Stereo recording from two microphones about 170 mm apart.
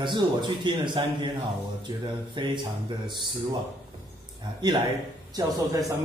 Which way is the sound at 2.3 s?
25° right (ahead or behind).